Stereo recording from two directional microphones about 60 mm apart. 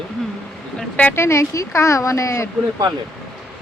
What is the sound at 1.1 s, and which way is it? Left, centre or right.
Speech, left.